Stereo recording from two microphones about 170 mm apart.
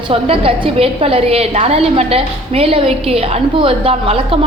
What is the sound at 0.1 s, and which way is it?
A woman's voice, 35° right (ahead or behind).